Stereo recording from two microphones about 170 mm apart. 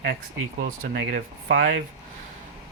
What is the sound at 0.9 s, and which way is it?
Speech, 90° right.